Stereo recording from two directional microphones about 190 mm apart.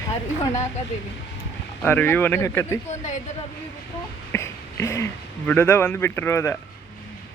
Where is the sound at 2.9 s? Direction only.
40° left (ahead or behind).